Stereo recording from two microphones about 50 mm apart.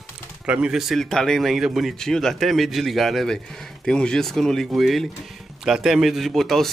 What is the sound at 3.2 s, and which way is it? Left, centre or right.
Speech, centre.